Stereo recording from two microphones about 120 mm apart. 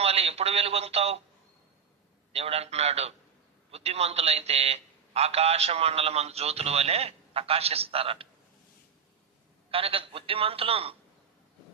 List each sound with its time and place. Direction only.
0.0 s a man's voice: 55° right (ahead or behind)
2.3 s a man's voice: 60° right (ahead or behind)
9.6 s a man's voice: 50° right (ahead or behind)